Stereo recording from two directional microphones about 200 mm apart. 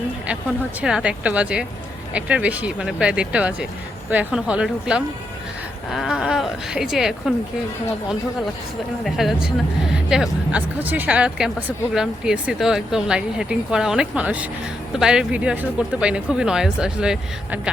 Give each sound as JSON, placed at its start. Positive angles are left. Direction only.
{"t": 0.8, "sound": "speech", "side_deg": -5}
{"t": 9.0, "sound": "speech", "side_deg": 0}